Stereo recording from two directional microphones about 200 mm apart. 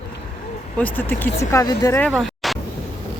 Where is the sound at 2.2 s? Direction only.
Centre (ahead or behind).